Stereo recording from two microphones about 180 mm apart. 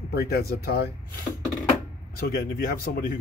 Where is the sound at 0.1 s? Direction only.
60° left (ahead or behind).